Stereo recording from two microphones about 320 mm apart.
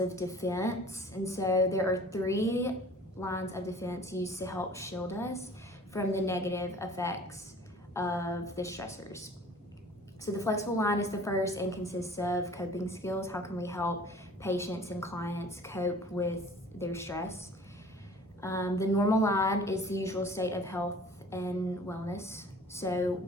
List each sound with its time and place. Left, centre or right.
0.2 s a woman's voice: centre